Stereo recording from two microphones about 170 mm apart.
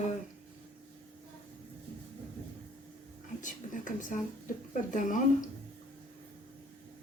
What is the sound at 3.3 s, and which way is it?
A woman's voice, 50° left (ahead or behind).